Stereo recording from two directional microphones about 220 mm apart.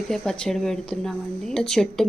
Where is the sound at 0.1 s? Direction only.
Centre (ahead or behind).